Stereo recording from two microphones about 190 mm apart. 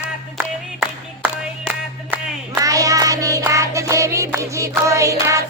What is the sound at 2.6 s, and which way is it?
Child singing, 15° right (ahead or behind).